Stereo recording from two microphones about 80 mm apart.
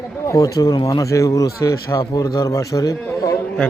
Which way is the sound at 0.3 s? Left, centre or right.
Left.